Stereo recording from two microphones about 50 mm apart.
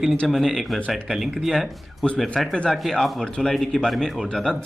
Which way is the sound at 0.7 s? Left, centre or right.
Centre.